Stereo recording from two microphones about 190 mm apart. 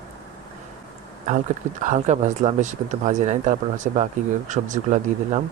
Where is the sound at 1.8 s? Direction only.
40° right (ahead or behind).